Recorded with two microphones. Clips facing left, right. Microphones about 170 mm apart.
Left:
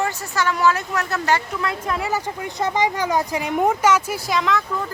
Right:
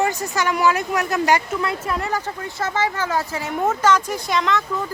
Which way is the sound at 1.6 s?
Centre (ahead or behind).